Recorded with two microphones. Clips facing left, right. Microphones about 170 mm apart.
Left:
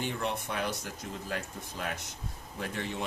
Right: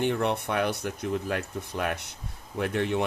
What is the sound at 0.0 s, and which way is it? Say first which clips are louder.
Speech: right 8 dB; 60° right (ahead or behind).